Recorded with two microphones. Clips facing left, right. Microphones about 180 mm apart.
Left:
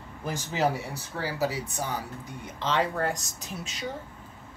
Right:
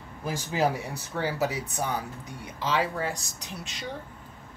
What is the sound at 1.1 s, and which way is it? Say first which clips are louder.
Speech: right 1 dB; 20° right (ahead or behind).